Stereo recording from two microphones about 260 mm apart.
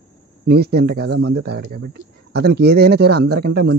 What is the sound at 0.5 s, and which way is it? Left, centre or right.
Speech, right.